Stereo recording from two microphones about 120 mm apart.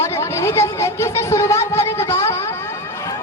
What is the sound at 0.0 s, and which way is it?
A man's voice, 25° left (ahead or behind).